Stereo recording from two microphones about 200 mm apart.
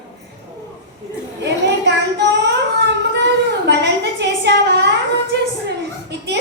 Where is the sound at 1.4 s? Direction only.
60° right (ahead or behind).